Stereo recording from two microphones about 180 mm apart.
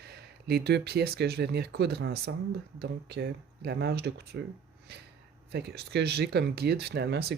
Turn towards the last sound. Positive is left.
turn(degrees=-65)  # may be behind; listen again after turning